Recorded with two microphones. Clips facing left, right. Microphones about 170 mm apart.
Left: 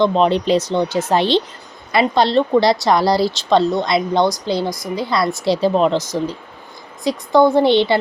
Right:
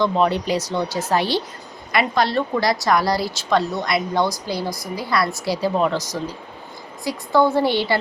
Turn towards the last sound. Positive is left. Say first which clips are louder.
# left 6 dB
turn(degrees=20)  # may be behind; listen again after turning